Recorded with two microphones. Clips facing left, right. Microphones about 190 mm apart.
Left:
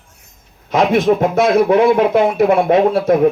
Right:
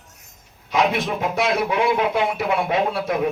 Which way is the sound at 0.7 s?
45° left (ahead or behind).